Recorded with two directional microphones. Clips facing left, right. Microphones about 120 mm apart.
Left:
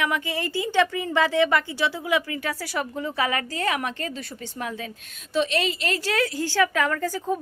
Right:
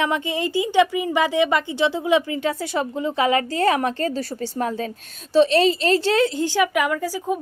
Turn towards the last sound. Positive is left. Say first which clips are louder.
# right 2 dB
turn(degrees=-15)  # may be behind; listen again after turning